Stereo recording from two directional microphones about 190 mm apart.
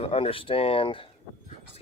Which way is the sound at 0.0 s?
30° left (ahead or behind).